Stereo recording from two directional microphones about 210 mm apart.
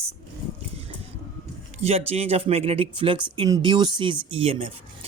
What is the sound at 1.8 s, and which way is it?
Speech, 30° right (ahead or behind).